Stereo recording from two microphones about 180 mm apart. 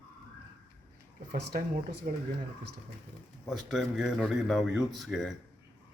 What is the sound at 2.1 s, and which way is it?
Speech, 50° right (ahead or behind).